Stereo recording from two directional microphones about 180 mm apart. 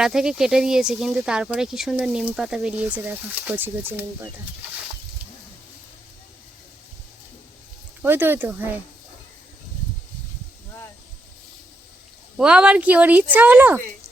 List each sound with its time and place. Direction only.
0.0 s speech: 5° right (ahead or behind)
8.0 s a woman's voice: 10° right (ahead or behind)
12.4 s a woman's voice: 5° right (ahead or behind)